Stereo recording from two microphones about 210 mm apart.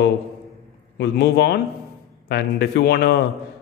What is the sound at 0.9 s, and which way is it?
A man's voice, 55° left (ahead or behind).